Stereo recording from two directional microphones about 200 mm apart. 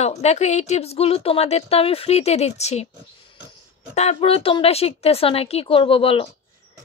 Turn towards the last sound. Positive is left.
turn(degrees=30)  # may be behind; listen again after turning